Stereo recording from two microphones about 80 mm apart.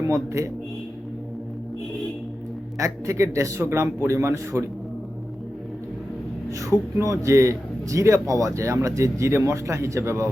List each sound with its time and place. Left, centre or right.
0.0 s a man's voice: right
2.7 s a man's voice: right
7.0 s a man's voice: right